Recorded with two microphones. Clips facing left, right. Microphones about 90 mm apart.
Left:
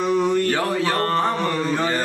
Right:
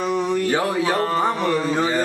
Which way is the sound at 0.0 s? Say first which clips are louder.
Left 2 dB; centre (ahead or behind).